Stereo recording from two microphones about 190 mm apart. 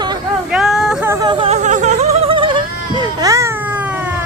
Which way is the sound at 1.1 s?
20° right (ahead or behind).